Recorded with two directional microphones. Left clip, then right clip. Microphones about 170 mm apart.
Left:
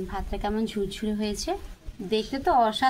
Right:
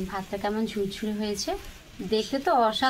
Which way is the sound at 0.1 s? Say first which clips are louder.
Right 2 dB; 20° left (ahead or behind).